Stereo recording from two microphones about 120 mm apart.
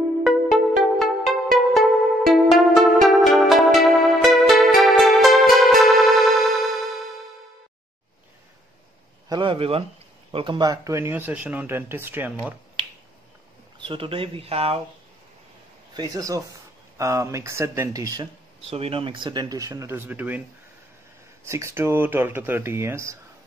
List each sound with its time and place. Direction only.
0.2 s music: centre (ahead or behind)
9.3 s a sound: 45° right (ahead or behind)
10.3 s speech: 45° right (ahead or behind)
10.7 s speech: 25° right (ahead or behind)
13.7 s speech: 45° right (ahead or behind)
15.9 s speech: 35° right (ahead or behind)
18.7 s speech: 55° right (ahead or behind); by 20.4 s 15° right (ahead or behind)
21.5 s speech: 25° right (ahead or behind)